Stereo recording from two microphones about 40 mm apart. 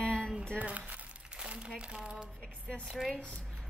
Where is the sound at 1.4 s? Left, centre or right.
Right.